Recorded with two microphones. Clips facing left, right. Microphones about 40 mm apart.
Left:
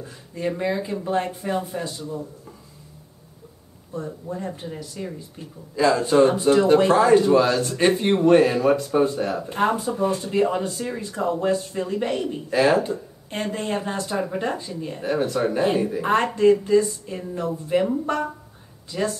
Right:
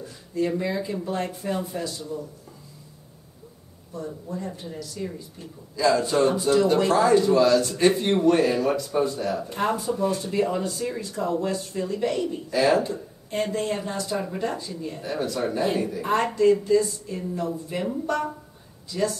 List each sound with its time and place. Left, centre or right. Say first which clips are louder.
0.0 s a sound: right 4 dB; left
0.6 s speech: left 2 dB; left
3.9 s speech: left 2 dB; left
14.1 s speech: left 3 dB; centre
14.4 s speech: left 2 dB; left